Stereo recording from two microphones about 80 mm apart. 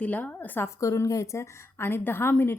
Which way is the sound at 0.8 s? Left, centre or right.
Left.